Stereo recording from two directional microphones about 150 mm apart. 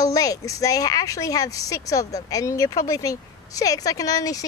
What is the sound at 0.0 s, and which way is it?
Speech, 25° left (ahead or behind).